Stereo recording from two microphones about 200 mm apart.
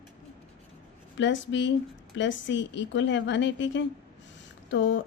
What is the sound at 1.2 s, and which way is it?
A woman's voice, 65° left (ahead or behind).